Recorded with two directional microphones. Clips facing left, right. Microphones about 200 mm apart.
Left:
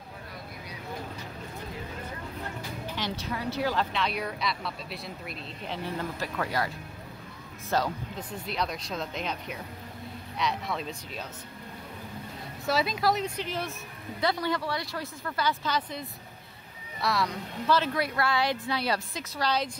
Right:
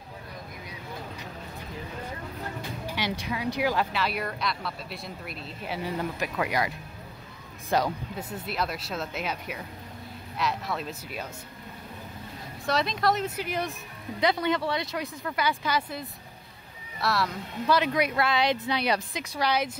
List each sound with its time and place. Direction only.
3.0 s speech: 10° right (ahead or behind)
7.7 s speech: 10° right (ahead or behind)
12.6 s speech: 5° left (ahead or behind)
13.5 s speech: 15° right (ahead or behind)
17.6 s speech: 15° right (ahead or behind)